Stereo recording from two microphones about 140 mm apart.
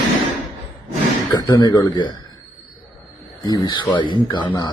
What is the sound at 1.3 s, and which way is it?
Speech, 30° left (ahead or behind).